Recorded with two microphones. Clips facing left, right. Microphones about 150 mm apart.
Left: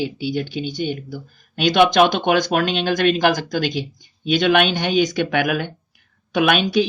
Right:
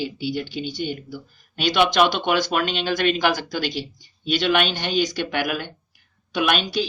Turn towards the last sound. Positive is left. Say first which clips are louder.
# left 5 dB
turn(degrees=55)  # may be behind; listen again after turning